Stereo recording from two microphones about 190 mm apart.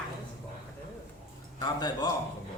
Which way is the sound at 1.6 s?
20° left (ahead or behind).